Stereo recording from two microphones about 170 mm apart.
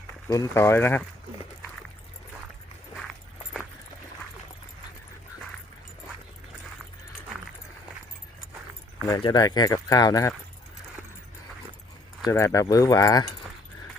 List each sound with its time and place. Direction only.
0.3 s speech: 20° left (ahead or behind)
9.0 s speech: 25° left (ahead or behind)
12.3 s speech: 20° left (ahead or behind)